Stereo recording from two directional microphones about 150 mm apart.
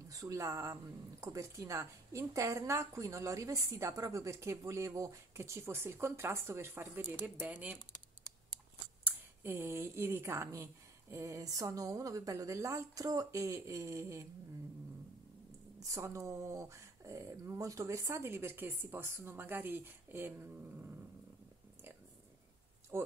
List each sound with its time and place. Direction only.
0.1 s a woman's voice: 20° right (ahead or behind)
9.4 s a woman's voice: 15° right (ahead or behind)
15.8 s speech: 20° right (ahead or behind)
22.9 s speech: 15° right (ahead or behind)